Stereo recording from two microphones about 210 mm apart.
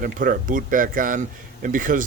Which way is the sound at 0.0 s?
40° right (ahead or behind).